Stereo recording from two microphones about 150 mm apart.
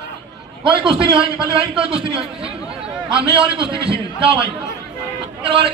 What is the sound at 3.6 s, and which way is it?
Speech, 35° right (ahead or behind).